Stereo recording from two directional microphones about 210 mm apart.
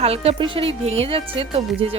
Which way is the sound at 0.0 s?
30° right (ahead or behind).